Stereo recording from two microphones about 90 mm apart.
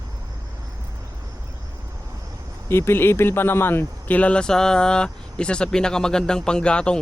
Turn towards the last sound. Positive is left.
turn(degrees=10)  # may be behind; listen again after turning